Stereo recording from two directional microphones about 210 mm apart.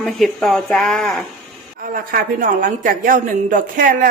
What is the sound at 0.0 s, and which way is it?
Speech, centre (ahead or behind).